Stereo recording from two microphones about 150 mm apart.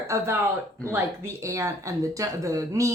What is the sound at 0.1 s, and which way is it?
A woman's voice, 15° right (ahead or behind).